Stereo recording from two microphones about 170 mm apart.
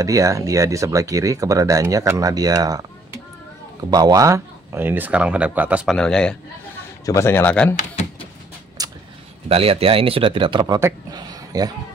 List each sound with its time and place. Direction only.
0.0 s speech: 20° right (ahead or behind)
3.9 s speech: 20° right (ahead or behind)
5.9 s a man's voice: 5° left (ahead or behind)
7.1 s a man's voice: 15° left (ahead or behind)
7.7 s speech: 45° left (ahead or behind)
8.8 s a sound: 20° right (ahead or behind)
9.5 s speech: 35° right (ahead or behind)